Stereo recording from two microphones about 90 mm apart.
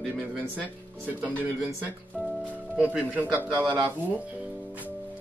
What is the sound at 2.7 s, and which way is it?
Speech, 15° right (ahead or behind).